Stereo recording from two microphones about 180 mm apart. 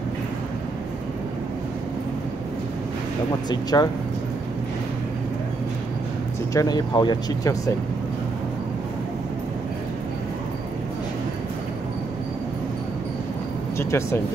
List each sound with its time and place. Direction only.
3.4 s speech: 20° left (ahead or behind)
6.5 s speech: 20° left (ahead or behind)
13.7 s speech: 15° left (ahead or behind)